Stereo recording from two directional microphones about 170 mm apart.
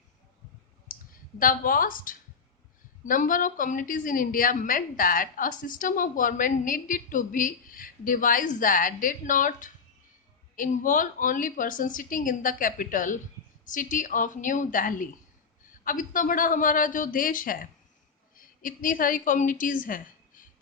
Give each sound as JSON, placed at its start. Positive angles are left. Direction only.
{"t": 0.9, "sound": "clicking", "side_deg": 55}
{"t": 1.4, "sound": "a woman's voice", "side_deg": 55}